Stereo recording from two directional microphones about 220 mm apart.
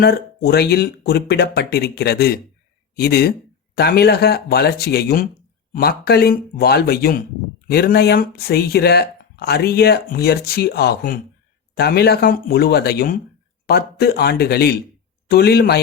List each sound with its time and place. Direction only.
0.0 s speech: 45° left (ahead or behind)